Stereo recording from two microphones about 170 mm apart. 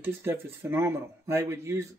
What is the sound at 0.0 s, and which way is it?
Speech, 15° right (ahead or behind).